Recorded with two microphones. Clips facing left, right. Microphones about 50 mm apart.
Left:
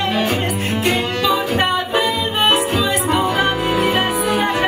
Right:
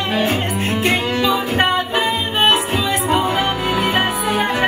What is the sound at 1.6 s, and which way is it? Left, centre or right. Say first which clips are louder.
Music: even; right.